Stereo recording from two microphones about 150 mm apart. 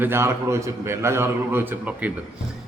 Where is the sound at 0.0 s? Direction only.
15° right (ahead or behind).